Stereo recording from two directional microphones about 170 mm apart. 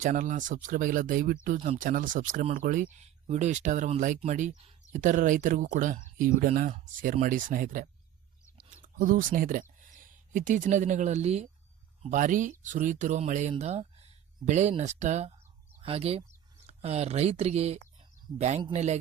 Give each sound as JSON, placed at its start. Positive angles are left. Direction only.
{"t": 0.0, "sound": "speech", "side_deg": -50}
{"t": 3.0, "sound": "speech", "side_deg": -40}